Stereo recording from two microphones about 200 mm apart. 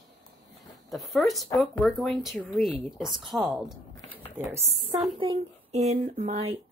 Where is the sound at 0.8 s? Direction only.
Centre (ahead or behind).